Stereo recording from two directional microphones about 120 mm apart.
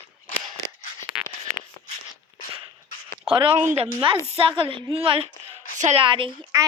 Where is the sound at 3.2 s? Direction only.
45° right (ahead or behind).